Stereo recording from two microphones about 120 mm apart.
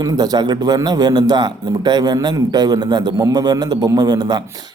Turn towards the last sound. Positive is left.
turn(degrees=-35)  # may be behind; listen again after turning